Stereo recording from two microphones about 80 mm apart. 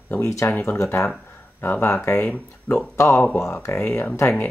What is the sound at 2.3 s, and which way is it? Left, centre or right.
Speech, centre.